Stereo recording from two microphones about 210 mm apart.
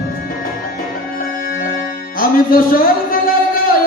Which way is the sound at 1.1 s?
40° left (ahead or behind).